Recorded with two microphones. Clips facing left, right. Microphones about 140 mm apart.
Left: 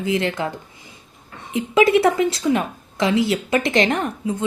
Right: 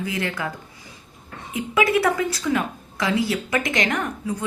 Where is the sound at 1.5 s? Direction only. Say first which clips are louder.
Left 5 dB; 25° left (ahead or behind).